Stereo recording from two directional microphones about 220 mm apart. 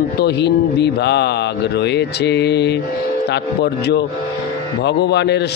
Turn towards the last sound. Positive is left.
turn(degrees=50)  # may be behind; listen again after turning